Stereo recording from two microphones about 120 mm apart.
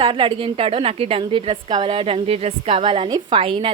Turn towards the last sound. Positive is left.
turn(degrees=-50)  # may be behind; listen again after turning